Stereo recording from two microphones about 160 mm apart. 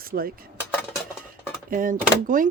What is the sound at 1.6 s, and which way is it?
Speech, 60° right (ahead or behind).